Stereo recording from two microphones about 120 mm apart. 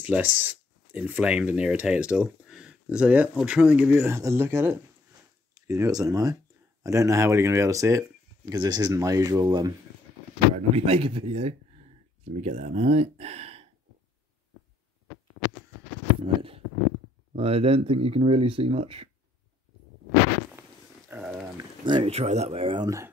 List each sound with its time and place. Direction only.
0.0 s speech: 15° right (ahead or behind)
5.5 s speech: 30° right (ahead or behind)
10.7 s speech: 50° right (ahead or behind)
16.2 s a sound: 50° right (ahead or behind)
17.4 s speech: 55° right (ahead or behind)
21.2 s a sound: 5° right (ahead or behind)
21.8 s speech: 40° right (ahead or behind)
22.1 s speech: 65° right (ahead or behind)
22.8 s speech: 25° right (ahead or behind)